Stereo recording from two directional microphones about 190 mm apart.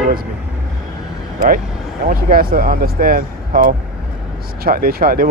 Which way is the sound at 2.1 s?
50° right (ahead or behind).